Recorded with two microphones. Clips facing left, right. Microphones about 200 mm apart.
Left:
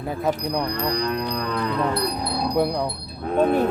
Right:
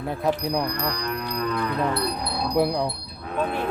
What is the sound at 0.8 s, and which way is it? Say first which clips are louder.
Moo: left 4 dB; 25° left (ahead or behind).